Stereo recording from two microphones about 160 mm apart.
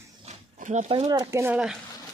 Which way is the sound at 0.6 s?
50° right (ahead or behind).